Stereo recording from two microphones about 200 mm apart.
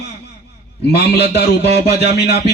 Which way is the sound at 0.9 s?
55° left (ahead or behind).